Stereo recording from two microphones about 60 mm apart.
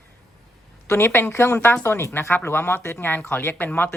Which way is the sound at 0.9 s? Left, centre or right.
Left.